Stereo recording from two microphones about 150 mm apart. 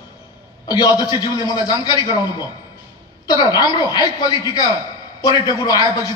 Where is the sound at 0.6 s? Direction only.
25° left (ahead or behind).